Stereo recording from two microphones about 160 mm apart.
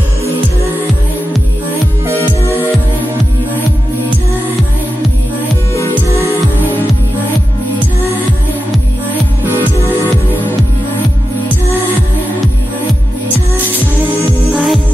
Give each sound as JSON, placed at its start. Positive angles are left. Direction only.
{"t": 6.0, "sound": "music", "side_deg": -20}
{"t": 14.5, "sound": "music", "side_deg": 0}